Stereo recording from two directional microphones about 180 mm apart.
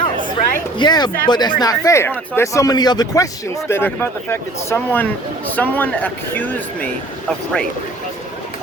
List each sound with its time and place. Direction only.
0.8 s speech: 25° left (ahead or behind); by 7.6 s 5° left (ahead or behind)